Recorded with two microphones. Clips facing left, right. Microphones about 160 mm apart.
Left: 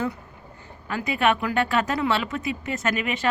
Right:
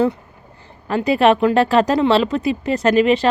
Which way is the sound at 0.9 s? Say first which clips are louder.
Right 8 dB; 35° right (ahead or behind).